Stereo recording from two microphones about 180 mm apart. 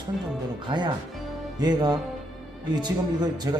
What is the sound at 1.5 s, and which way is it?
A man's voice, 20° right (ahead or behind).